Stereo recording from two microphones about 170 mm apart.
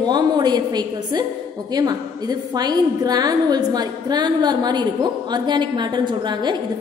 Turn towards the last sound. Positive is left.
turn(degrees=-25)  # may be behind; listen again after turning